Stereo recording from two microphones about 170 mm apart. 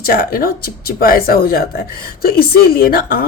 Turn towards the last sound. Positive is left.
turn(degrees=60)  # may be behind; listen again after turning